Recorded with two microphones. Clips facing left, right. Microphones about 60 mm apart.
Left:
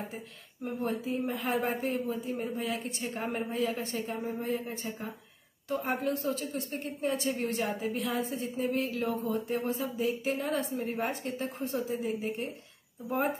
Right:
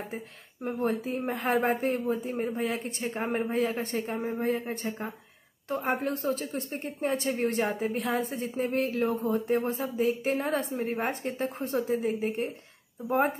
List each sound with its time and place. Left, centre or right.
0.7 s a woman's voice: right